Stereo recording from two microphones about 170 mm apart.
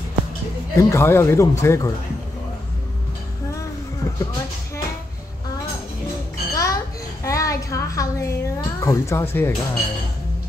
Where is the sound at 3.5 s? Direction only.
20° left (ahead or behind).